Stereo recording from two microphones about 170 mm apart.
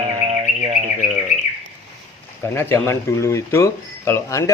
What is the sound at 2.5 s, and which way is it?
Speech, 15° left (ahead or behind).